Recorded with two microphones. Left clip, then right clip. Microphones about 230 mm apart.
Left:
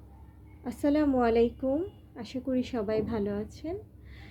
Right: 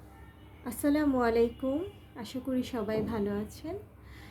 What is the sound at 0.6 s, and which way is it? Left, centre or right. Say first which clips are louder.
A woman's voice: left 2 dB; centre.